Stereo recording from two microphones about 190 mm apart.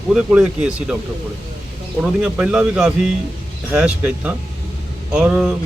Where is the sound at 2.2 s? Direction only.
5° right (ahead or behind).